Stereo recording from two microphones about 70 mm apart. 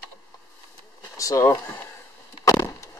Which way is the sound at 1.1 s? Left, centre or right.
Left.